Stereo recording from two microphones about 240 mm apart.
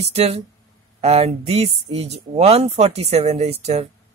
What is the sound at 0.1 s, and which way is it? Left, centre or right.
Speech, right.